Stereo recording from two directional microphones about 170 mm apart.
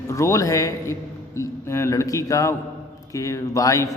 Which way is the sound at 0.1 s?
20° left (ahead or behind).